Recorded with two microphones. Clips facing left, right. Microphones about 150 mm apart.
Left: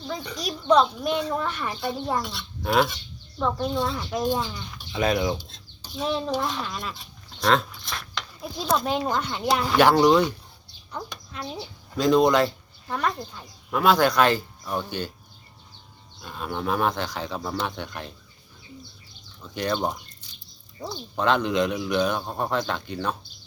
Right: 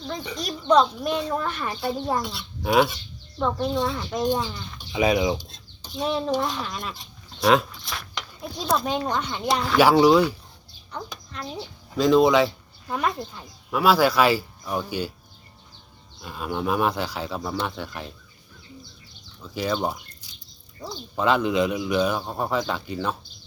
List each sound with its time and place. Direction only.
0.1 s speech: centre (ahead or behind)
11.1 s speech: 5° left (ahead or behind)
16.2 s speech: 5° right (ahead or behind)
19.5 s speech: 5° right (ahead or behind)
21.2 s speech: 5° right (ahead or behind)